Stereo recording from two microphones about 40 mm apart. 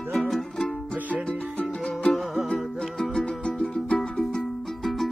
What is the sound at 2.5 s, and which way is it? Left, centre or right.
Music, centre.